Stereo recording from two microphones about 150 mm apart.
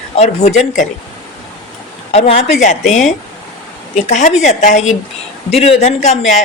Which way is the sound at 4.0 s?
50° left (ahead or behind).